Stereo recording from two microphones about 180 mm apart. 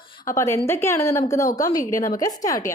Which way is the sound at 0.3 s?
15° left (ahead or behind).